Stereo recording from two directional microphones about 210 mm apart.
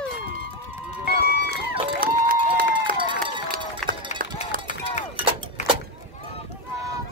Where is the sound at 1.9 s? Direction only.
45° right (ahead or behind).